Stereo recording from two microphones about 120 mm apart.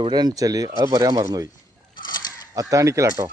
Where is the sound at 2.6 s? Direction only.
25° right (ahead or behind).